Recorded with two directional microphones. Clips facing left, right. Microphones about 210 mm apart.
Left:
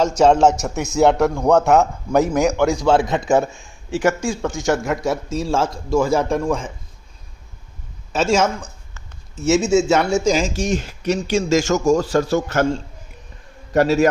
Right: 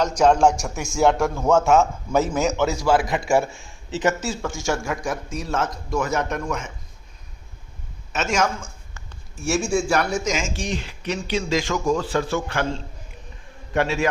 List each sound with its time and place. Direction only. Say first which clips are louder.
0.0 s a man's voice: left 3 dB; 25° left (ahead or behind)
8.1 s a man's voice: left 5 dB; 30° left (ahead or behind)